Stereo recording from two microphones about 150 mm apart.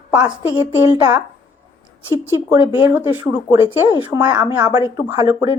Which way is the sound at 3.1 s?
15° right (ahead or behind).